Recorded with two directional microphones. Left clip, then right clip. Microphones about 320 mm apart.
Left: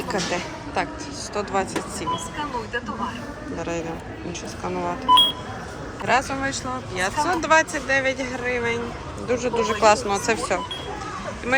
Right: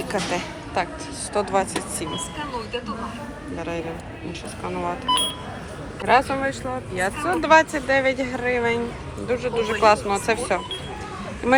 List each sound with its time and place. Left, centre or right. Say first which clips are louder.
0.1 s a woman's voice: left 1 dB; centre
4.6 s speech: even; centre
6.1 s speech: right 3 dB; centre
11.5 s speech: right 4 dB; centre